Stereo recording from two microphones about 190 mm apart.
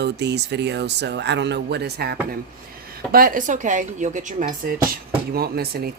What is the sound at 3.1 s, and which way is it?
Speech, 45° right (ahead or behind).